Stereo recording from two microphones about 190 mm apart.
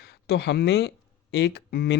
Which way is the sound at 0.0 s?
60° left (ahead or behind).